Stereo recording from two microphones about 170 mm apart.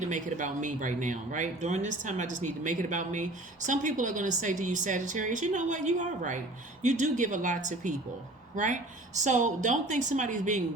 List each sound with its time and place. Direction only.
0.0 s speech: 45° right (ahead or behind)